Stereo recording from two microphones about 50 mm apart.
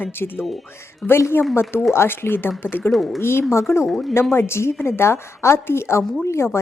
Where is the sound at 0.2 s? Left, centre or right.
Left.